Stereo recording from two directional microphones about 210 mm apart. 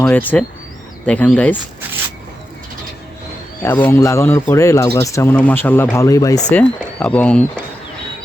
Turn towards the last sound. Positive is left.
turn(degrees=5)  # may be behind; listen again after turning